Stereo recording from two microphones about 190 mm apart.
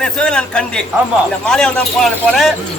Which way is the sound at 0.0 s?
5° left (ahead or behind).